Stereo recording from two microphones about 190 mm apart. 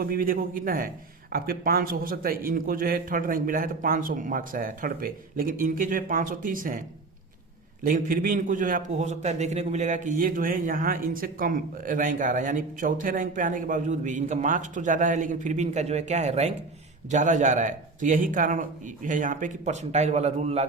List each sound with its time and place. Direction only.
0.0 s a man's voice: 50° right (ahead or behind)
7.9 s a man's voice: 45° right (ahead or behind)